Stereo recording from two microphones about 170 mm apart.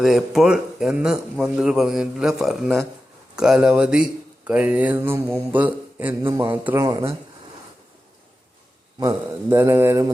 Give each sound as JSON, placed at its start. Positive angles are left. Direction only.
{"t": 0.0, "sound": "a man's voice", "side_deg": 0}
{"t": 9.0, "sound": "speech", "side_deg": -15}